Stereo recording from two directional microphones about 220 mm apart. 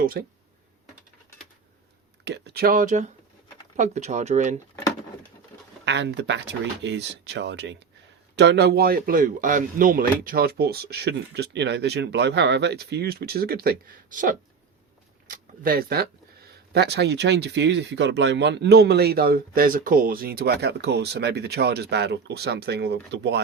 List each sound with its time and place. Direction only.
0.0 s speech: 40° right (ahead or behind)
2.2 s speech: 50° right (ahead or behind); by 4.6 s 30° right (ahead or behind)
5.8 s speech: 50° right (ahead or behind)